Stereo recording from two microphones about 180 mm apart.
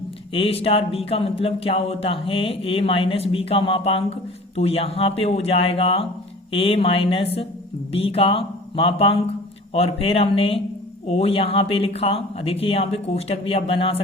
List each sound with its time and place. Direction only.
0.3 s speech: 30° left (ahead or behind)